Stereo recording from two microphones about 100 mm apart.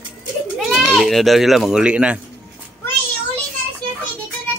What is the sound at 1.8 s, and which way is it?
Speech, 10° right (ahead or behind).